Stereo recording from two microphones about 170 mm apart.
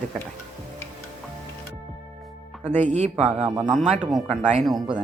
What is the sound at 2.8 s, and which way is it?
Speech, 45° right (ahead or behind).